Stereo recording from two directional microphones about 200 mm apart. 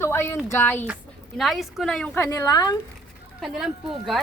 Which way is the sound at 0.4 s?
10° left (ahead or behind).